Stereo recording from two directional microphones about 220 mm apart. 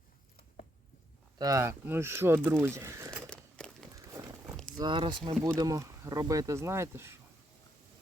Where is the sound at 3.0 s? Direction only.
5° left (ahead or behind).